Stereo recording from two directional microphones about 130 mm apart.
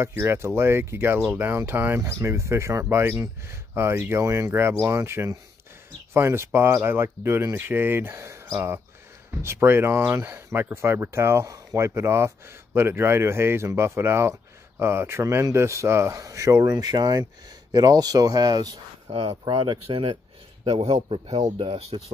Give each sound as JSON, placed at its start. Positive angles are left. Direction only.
{"t": 0.0, "sound": "speech", "side_deg": -20}
{"t": 19.0, "sound": "speech", "side_deg": -45}